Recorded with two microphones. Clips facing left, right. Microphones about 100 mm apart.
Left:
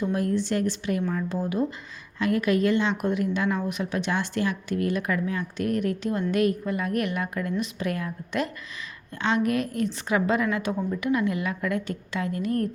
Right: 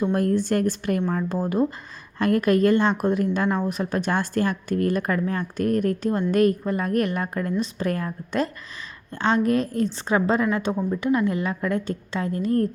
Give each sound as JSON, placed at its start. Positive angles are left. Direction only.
{"t": 0.0, "sound": "a woman's voice", "side_deg": -50}